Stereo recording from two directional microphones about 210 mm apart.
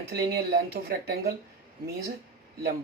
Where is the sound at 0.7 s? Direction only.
50° right (ahead or behind).